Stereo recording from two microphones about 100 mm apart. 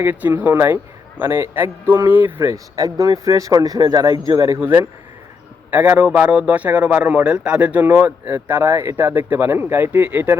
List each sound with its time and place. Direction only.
0.0 s a man's voice: 20° right (ahead or behind)
2.5 s a man's voice: 35° right (ahead or behind); by 10.3 s 20° right (ahead or behind)